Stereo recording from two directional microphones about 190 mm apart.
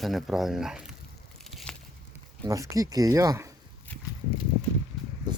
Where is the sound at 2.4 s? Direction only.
15° right (ahead or behind).